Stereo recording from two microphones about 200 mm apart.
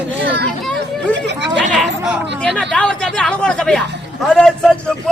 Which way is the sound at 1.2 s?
60° right (ahead or behind).